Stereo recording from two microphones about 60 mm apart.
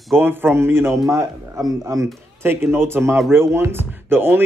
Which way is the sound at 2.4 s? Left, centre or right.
Right.